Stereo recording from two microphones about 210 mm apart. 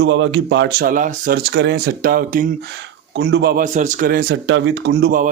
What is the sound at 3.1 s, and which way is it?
A man's voice, 55° right (ahead or behind).